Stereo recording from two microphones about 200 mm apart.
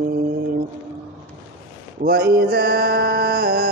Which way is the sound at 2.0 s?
50° right (ahead or behind).